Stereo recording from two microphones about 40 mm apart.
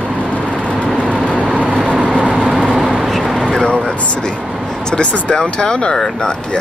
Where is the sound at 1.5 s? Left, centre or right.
Right.